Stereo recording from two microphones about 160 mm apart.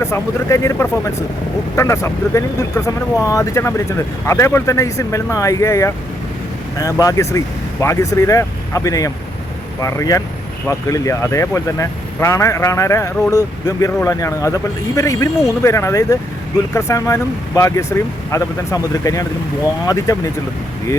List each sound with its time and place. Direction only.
0.0 s speech: 20° left (ahead or behind)